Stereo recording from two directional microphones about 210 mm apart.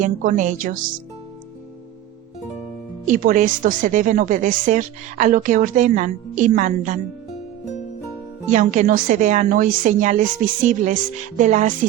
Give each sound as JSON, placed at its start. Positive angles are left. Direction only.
{"t": 0.0, "sound": "a woman's voice", "side_deg": -40}
{"t": 3.1, "sound": "a woman's voice", "side_deg": -40}
{"t": 8.4, "sound": "a woman's voice", "side_deg": -35}